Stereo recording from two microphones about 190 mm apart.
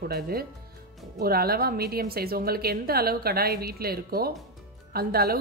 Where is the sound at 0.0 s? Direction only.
55° right (ahead or behind).